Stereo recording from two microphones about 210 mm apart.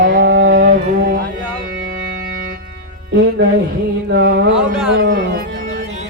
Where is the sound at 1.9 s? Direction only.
45° right (ahead or behind).